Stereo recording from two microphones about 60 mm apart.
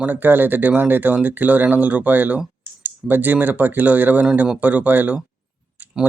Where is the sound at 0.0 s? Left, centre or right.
Right.